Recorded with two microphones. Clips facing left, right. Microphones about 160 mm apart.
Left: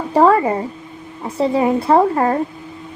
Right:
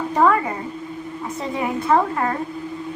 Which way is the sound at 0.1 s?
30° left (ahead or behind).